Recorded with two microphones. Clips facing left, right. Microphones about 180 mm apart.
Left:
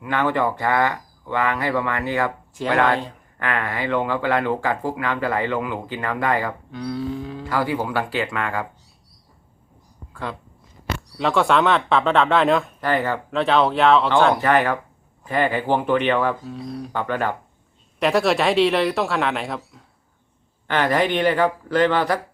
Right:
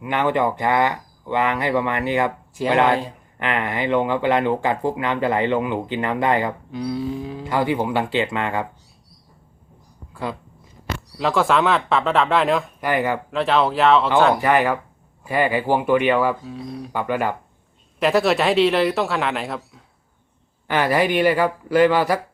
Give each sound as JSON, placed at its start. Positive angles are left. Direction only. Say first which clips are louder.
{"t": 0.0, "sound": "speech", "louder": "right 1 dB", "side_deg": -20}
{"t": 6.7, "sound": "speech", "louder": "right 2 dB", "side_deg": -10}
{"t": 7.4, "sound": "speech", "louder": "right 2 dB", "side_deg": -20}
{"t": 11.2, "sound": "speech", "louder": "even", "side_deg": 0}
{"t": 12.8, "sound": "speech", "louder": "right 1 dB", "side_deg": -15}
{"t": 13.3, "sound": "speech", "louder": "left 2 dB", "side_deg": 0}
{"t": 14.4, "sound": "speech", "louder": "right 1 dB", "side_deg": -10}